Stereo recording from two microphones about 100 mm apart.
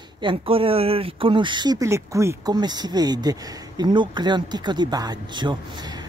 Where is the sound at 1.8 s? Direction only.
30° right (ahead or behind).